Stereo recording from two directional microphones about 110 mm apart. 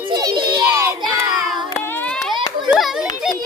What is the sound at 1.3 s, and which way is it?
Child singing, centre (ahead or behind).